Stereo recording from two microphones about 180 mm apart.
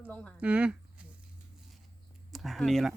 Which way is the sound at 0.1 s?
5° left (ahead or behind).